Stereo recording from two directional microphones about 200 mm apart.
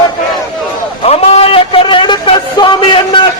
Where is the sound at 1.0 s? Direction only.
30° left (ahead or behind).